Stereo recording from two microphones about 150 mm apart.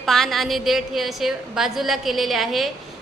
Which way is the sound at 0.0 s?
Centre (ahead or behind).